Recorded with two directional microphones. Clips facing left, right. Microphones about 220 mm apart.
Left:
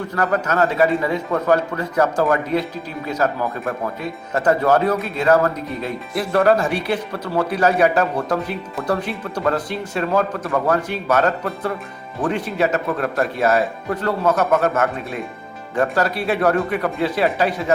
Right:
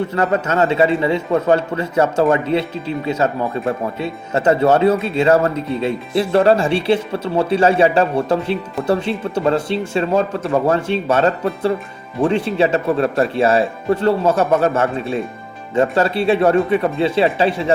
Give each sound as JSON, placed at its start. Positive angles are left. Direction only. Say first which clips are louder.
{"t": 0.1, "sound": "speech", "louder": "right 3 dB", "side_deg": -25}
{"t": 4.4, "sound": "speech", "louder": "right 3 dB", "side_deg": -25}